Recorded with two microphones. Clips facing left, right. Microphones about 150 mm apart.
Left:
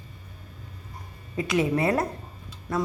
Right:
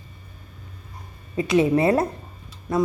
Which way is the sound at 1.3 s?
25° right (ahead or behind).